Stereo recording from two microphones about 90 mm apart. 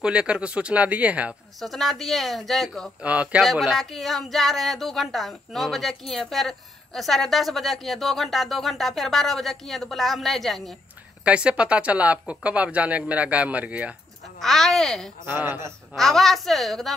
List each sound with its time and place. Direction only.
0.0 s speech: 10° right (ahead or behind)
1.6 s speech: centre (ahead or behind)
3.0 s speech: 15° right (ahead or behind)
3.3 s speech: 5° right (ahead or behind)
11.2 s speech: 10° right (ahead or behind)
14.4 s speech: 5° left (ahead or behind)
15.2 s speech: 25° right (ahead or behind)
15.9 s speech: 5° left (ahead or behind)